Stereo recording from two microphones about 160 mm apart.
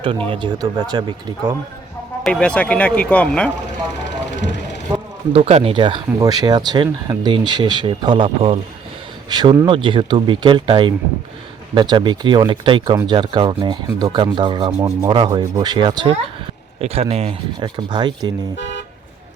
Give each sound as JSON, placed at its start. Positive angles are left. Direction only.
{"t": 0.3, "sound": "speech", "side_deg": -30}
{"t": 2.2, "sound": "speech", "side_deg": 5}
{"t": 5.3, "sound": "speech", "side_deg": -40}
{"t": 16.8, "sound": "speech", "side_deg": -40}
{"t": 17.8, "sound": "speech", "side_deg": -25}
{"t": 18.5, "sound": "speech", "side_deg": 90}